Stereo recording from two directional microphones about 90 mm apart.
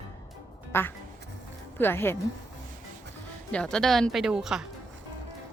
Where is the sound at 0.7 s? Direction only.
25° left (ahead or behind).